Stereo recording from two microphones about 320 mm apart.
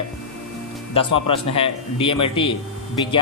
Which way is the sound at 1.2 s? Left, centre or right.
Left.